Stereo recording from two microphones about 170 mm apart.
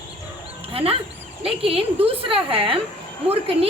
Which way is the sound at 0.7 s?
35° right (ahead or behind).